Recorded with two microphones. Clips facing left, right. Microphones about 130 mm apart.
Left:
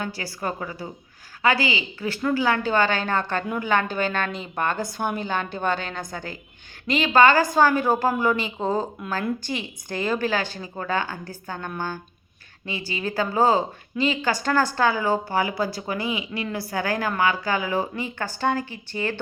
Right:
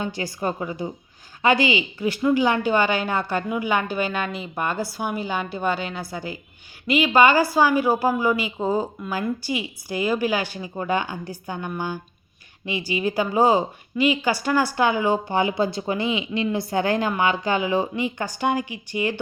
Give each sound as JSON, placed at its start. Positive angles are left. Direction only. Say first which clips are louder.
{"t": 0.0, "sound": "a woman's voice", "louder": "right 3 dB", "side_deg": -20}